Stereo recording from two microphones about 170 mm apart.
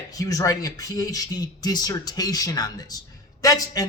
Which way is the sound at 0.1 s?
20° left (ahead or behind).